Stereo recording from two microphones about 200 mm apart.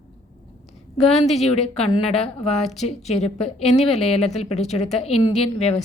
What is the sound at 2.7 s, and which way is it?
A woman's voice, 35° left (ahead or behind).